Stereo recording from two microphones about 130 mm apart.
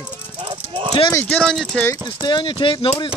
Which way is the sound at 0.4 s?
40° right (ahead or behind).